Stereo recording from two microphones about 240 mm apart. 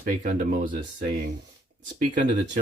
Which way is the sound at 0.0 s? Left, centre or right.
Right.